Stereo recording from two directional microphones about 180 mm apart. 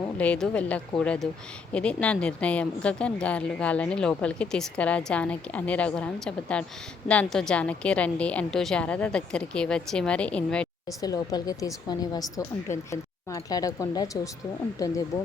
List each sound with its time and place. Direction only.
0.0 s a woman's voice: 5° left (ahead or behind)
10.8 s a woman's voice: 20° left (ahead or behind)